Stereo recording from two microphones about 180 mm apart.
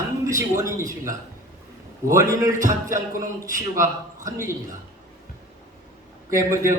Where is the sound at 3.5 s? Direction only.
15° right (ahead or behind).